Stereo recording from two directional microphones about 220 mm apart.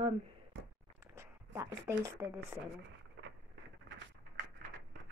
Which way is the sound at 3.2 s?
55° right (ahead or behind).